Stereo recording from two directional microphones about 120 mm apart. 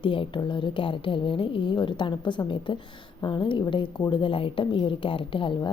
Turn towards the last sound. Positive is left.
turn(degrees=45)  # may be behind; listen again after turning